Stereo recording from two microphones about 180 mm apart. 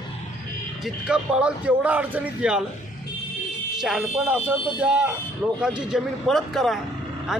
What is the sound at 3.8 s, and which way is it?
Speech, 5° right (ahead or behind).